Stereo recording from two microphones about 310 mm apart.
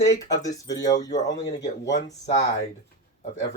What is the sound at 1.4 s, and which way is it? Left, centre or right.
Speech, left.